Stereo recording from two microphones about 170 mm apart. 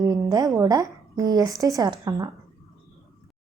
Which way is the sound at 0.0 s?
20° right (ahead or behind).